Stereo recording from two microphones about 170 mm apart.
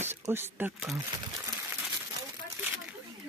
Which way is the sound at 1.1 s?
20° right (ahead or behind).